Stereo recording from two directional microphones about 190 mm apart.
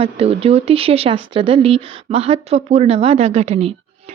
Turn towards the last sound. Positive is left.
turn(degrees=-35)  # may be behind; listen again after turning